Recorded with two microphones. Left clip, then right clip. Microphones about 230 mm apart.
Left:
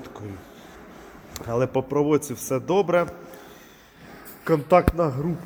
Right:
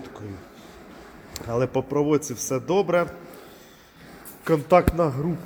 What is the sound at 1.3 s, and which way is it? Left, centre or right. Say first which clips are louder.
Speech: left 1 dB; centre.